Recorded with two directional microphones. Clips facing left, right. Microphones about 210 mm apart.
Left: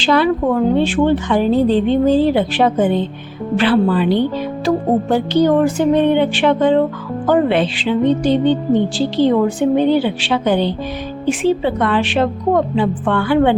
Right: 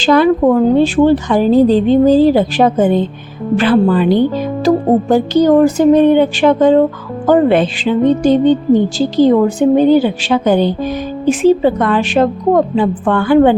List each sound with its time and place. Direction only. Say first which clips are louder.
0.0 s speech: right 5 dB; 45° right (ahead or behind)
3.6 s music: right 3 dB; 45° right (ahead or behind)